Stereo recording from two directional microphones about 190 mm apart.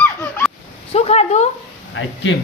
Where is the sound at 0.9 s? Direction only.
35° left (ahead or behind).